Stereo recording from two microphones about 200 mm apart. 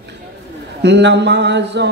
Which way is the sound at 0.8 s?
60° right (ahead or behind).